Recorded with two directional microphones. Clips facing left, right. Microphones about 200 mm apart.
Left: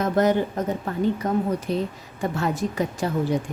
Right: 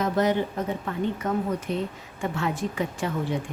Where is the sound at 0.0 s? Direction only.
45° left (ahead or behind).